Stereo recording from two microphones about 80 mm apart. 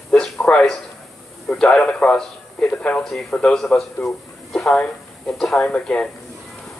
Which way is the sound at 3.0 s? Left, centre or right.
Centre.